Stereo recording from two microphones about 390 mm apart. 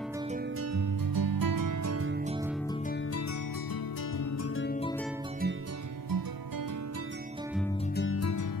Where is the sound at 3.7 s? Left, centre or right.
Left.